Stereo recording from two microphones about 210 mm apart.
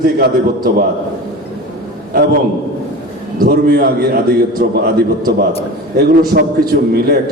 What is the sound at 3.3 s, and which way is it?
A man's voice, 45° right (ahead or behind).